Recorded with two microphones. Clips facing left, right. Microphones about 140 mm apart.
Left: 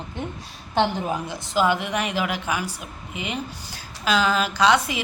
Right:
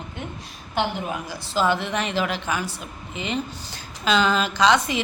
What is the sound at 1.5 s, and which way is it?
A woman's voice, 15° left (ahead or behind).